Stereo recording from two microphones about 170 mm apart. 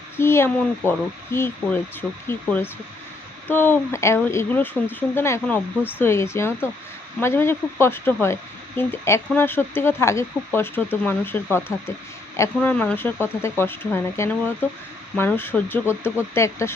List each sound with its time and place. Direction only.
0.2 s speech: 15° left (ahead or behind)